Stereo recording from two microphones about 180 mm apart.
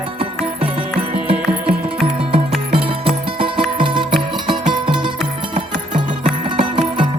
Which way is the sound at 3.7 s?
25° right (ahead or behind).